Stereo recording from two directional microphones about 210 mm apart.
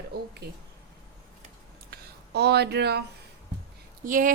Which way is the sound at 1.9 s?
50° right (ahead or behind).